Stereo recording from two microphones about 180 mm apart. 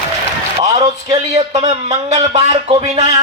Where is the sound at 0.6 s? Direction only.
35° right (ahead or behind).